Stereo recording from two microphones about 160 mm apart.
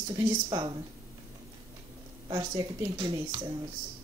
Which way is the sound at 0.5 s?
30° right (ahead or behind).